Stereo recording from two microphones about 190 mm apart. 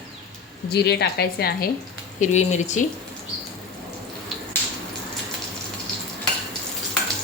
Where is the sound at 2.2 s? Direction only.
40° left (ahead or behind).